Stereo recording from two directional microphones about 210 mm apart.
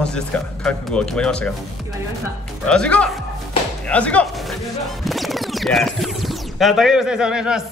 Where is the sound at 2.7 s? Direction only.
5° left (ahead or behind).